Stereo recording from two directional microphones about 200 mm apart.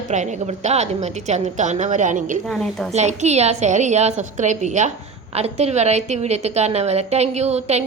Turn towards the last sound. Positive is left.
turn(degrees=-35)  # may be behind; listen again after turning